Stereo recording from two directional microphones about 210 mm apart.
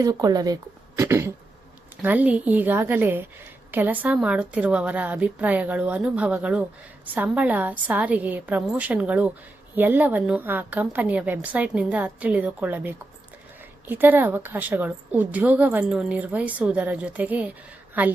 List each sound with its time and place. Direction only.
0.0 s a woman's voice: 20° right (ahead or behind)